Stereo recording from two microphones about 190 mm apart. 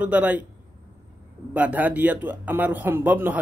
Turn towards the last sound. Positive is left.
turn(degrees=-10)  # may be behind; listen again after turning